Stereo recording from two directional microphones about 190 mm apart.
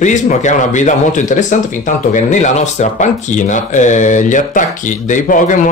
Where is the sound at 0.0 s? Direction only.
40° left (ahead or behind).